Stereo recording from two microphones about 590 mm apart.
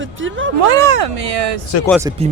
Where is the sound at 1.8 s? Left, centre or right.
Centre.